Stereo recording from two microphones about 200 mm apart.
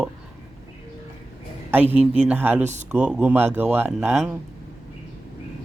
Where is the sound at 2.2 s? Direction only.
10° right (ahead or behind).